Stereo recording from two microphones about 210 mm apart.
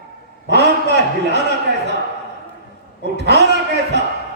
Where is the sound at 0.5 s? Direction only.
50° right (ahead or behind).